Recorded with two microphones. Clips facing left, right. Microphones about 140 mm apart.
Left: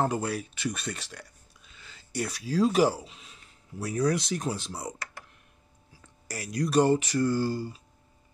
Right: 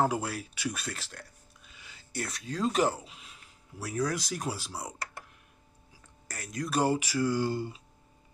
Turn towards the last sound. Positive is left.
turn(degrees=-20)  # may be behind; listen again after turning